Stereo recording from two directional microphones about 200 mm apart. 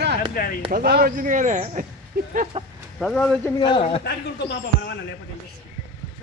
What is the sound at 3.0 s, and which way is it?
Speech, 5° left (ahead or behind).